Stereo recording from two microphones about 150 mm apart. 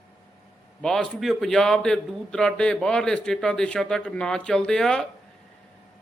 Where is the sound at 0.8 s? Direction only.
5° left (ahead or behind).